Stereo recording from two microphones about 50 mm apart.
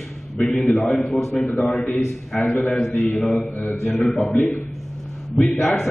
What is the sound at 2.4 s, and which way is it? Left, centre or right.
Speech, left.